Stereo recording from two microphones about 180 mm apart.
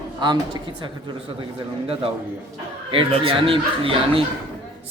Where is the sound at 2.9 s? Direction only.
30° right (ahead or behind).